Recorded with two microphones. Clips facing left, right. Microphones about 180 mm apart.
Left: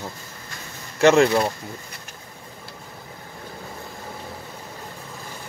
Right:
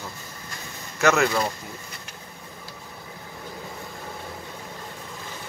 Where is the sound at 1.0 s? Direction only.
30° left (ahead or behind).